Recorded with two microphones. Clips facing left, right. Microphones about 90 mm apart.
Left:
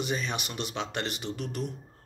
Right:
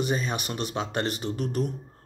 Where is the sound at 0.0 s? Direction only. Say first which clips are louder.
Right 4 dB; 40° right (ahead or behind).